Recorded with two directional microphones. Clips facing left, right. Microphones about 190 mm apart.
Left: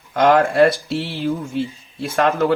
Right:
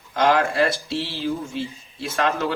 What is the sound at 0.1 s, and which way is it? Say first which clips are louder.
Speech: left 5 dB; 55° left (ahead or behind).